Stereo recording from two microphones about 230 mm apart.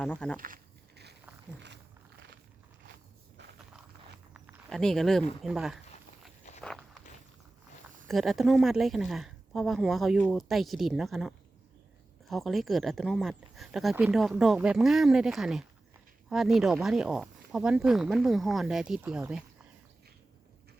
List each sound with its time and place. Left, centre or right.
0.0 s a woman's voice: centre
0.3 s a sound: right
4.4 s a sound: centre
5.4 s a woman's voice: centre
6.6 s walk: centre
8.0 s a woman's voice: centre